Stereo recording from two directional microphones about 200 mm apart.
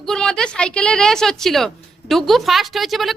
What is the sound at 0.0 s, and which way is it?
A woman's voice, 5° left (ahead or behind).